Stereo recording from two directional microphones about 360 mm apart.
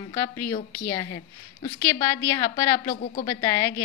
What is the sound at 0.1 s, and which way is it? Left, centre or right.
A woman's voice, centre.